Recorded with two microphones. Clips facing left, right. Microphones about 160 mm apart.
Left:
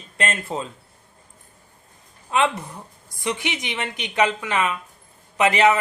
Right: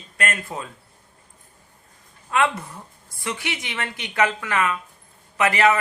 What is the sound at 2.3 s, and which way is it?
A woman's voice, 20° left (ahead or behind).